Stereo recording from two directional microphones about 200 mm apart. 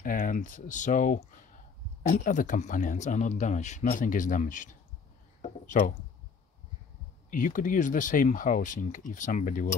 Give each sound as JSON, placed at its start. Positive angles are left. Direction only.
{"t": 0.0, "sound": "speech", "side_deg": 40}
{"t": 5.7, "sound": "speech", "side_deg": 40}
{"t": 7.2, "sound": "speech", "side_deg": 45}